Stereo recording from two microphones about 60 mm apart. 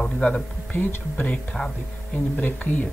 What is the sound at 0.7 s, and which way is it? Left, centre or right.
Speech, left.